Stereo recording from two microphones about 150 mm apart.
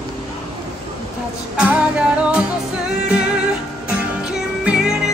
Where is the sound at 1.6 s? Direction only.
10° right (ahead or behind).